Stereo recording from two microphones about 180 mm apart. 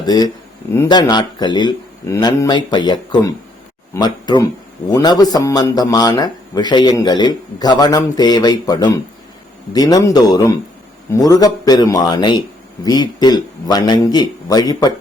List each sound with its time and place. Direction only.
0.0 s a man's voice: 20° left (ahead or behind)